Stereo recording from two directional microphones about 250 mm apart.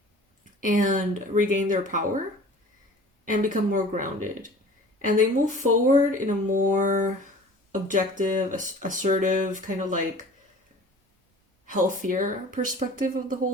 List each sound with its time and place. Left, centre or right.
0.6 s speech: right
3.2 s speech: right
11.6 s speech: right